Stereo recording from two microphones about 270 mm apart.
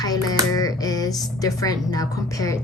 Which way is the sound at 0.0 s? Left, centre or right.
Centre.